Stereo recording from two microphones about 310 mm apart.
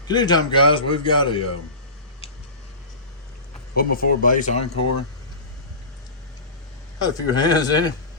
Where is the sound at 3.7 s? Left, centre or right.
Left.